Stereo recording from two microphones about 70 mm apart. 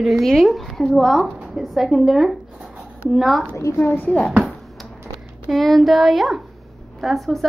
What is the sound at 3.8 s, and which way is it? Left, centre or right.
Speech, left.